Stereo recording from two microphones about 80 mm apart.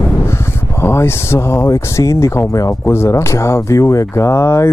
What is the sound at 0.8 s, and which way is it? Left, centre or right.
Speech, left.